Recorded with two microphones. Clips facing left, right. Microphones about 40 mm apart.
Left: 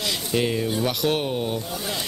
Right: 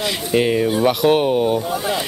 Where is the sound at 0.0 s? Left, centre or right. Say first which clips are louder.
Right 6 dB; right.